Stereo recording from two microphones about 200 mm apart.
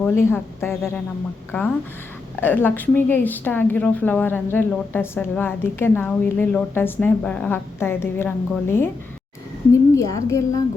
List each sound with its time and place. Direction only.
0.0 s a woman's voice: 10° left (ahead or behind)
9.9 s a woman's voice: 15° left (ahead or behind)